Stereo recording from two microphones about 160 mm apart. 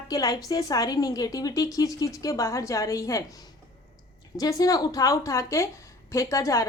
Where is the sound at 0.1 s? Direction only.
25° left (ahead or behind).